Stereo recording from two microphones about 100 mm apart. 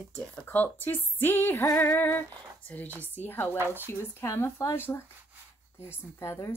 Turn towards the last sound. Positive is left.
turn(degrees=25)  # may be behind; listen again after turning